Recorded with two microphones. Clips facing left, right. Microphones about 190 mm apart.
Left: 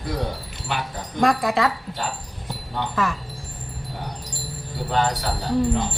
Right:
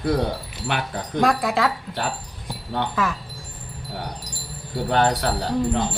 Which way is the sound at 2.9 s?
Centre (ahead or behind).